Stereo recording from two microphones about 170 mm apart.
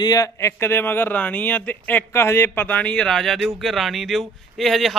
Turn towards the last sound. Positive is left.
turn(degrees=0)  # may be behind; listen again after turning